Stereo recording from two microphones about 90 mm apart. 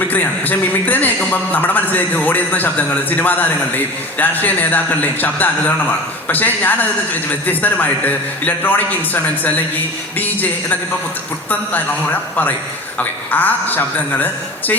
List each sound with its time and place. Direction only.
0.1 s a man's voice: 20° left (ahead or behind)